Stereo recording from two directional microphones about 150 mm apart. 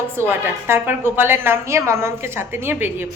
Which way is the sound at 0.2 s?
15° right (ahead or behind).